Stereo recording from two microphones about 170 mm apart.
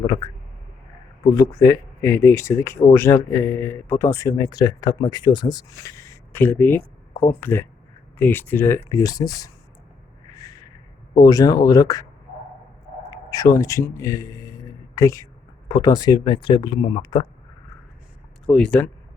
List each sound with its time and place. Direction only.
1.3 s speech: 20° left (ahead or behind)
10.3 s a sound: 20° left (ahead or behind)
11.2 s speech: 20° left (ahead or behind)
13.1 s speech: 20° left (ahead or behind)
18.4 s speech: 5° left (ahead or behind)